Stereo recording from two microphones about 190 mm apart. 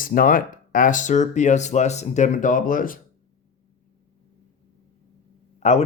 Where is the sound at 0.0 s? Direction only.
45° left (ahead or behind).